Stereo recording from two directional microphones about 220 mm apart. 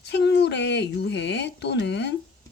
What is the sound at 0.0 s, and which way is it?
A woman's voice, 50° left (ahead or behind).